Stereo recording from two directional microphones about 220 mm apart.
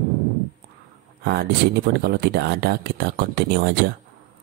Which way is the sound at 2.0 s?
45° right (ahead or behind).